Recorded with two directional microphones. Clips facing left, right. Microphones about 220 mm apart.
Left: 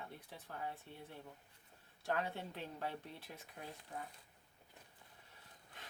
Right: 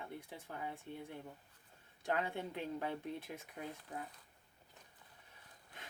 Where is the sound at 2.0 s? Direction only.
15° right (ahead or behind).